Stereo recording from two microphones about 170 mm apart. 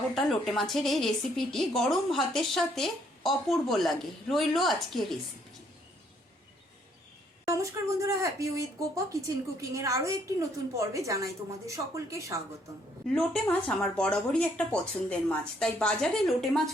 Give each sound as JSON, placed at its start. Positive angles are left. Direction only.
{"t": 0.1, "sound": "a woman's voice", "side_deg": 0}
{"t": 7.4, "sound": "speech", "side_deg": -15}
{"t": 13.1, "sound": "a woman's voice", "side_deg": 5}